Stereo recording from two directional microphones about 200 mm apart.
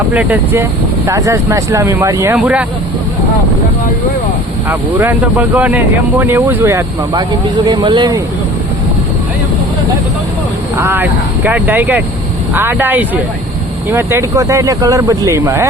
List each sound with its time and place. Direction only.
0.1 s speech: 10° right (ahead or behind)
4.7 s speech: 10° right (ahead or behind)
10.8 s speech: 10° right (ahead or behind)